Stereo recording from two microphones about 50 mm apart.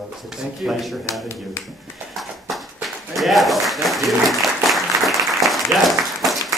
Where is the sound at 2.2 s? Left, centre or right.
Centre.